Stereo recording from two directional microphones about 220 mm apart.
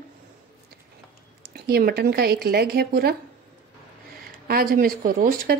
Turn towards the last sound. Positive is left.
turn(degrees=-40)  # may be behind; listen again after turning